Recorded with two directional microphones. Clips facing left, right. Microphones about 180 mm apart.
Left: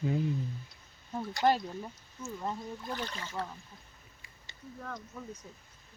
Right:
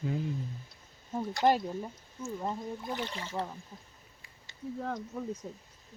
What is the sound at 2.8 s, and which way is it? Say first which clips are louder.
Speech: right 2 dB; 20° right (ahead or behind).